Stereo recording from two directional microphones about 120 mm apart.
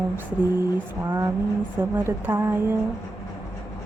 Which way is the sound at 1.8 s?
20° right (ahead or behind).